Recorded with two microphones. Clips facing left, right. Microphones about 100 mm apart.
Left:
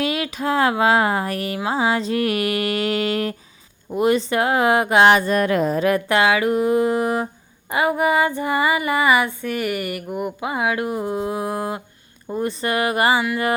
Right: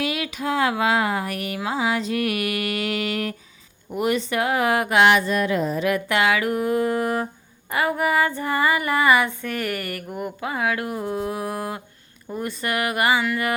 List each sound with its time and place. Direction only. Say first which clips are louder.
0.0 s speech: left 3 dB; 35° left (ahead or behind)
7.7 s female singing: left 3 dB; 20° left (ahead or behind)
12.3 s speech: left 4 dB; 25° left (ahead or behind)